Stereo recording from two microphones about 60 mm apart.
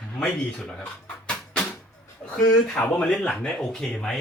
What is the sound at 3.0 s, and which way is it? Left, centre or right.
Speech, centre.